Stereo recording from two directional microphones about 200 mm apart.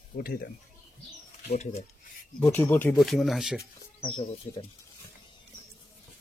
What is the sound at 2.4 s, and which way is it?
Speech, 10° left (ahead or behind).